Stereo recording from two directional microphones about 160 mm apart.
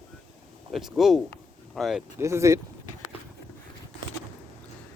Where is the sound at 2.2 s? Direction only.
20° right (ahead or behind).